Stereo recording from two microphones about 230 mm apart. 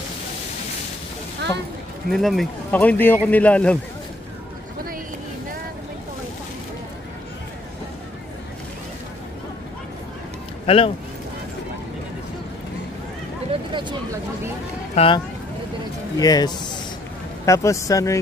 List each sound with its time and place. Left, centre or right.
2.0 s speech: centre
10.7 s speech: left
13.5 s vehicle: right
15.0 s speech: left